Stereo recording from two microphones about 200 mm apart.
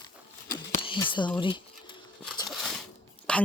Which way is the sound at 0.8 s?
25° left (ahead or behind).